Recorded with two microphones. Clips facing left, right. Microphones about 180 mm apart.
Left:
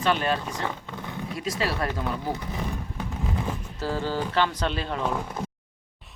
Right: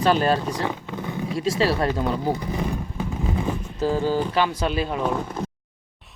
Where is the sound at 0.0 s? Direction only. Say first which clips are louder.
Right 5 dB; 35° right (ahead or behind).